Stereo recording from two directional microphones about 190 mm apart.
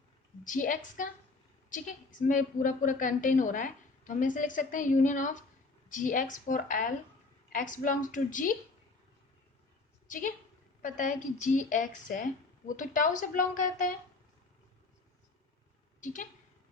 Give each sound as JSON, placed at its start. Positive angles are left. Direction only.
{"t": 0.4, "sound": "a woman's voice", "side_deg": 45}
{"t": 10.1, "sound": "a woman's voice", "side_deg": 45}